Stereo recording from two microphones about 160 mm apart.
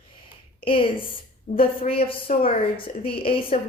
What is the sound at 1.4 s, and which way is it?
Speech, 60° left (ahead or behind).